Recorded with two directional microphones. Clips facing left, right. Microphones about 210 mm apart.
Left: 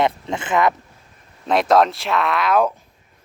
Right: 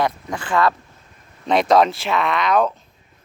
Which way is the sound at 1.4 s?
5° left (ahead or behind).